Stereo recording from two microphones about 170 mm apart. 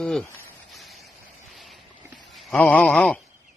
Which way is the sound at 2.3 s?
5° left (ahead or behind).